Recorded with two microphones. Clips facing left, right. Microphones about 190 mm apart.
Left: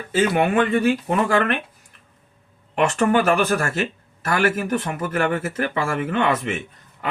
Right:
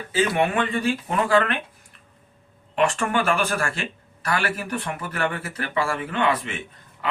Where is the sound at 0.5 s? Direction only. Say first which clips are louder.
Left 5 dB; 45° left (ahead or behind).